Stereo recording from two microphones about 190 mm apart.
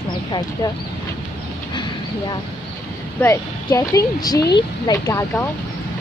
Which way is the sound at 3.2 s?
15° left (ahead or behind).